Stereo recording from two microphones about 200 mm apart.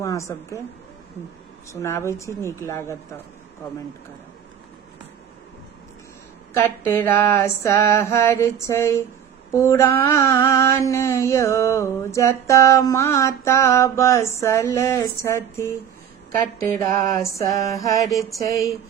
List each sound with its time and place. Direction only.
0.0 s a sound: 15° left (ahead or behind)
1.7 s mantra: 15° left (ahead or behind)
6.5 s mantra: 15° left (ahead or behind)